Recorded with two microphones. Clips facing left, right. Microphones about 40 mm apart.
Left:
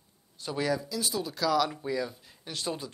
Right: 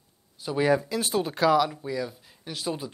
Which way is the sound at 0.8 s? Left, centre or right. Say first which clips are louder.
Right 5 dB; right.